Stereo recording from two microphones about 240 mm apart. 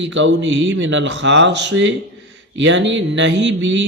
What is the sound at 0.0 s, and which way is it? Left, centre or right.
Speech, right.